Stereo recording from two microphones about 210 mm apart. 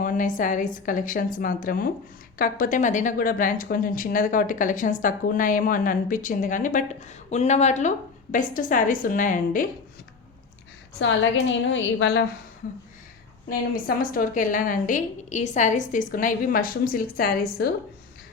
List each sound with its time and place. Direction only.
0.0 s speech: 40° left (ahead or behind)
11.0 s a woman's voice: 60° left (ahead or behind)
13.5 s speech: 40° left (ahead or behind)